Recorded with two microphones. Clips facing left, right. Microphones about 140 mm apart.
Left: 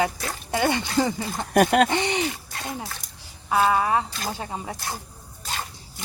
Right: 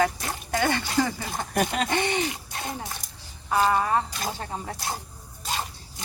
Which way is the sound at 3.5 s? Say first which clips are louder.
Left 2 dB; 10° left (ahead or behind).